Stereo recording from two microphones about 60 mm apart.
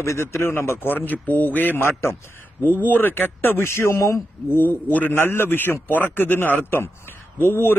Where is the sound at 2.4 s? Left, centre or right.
Left.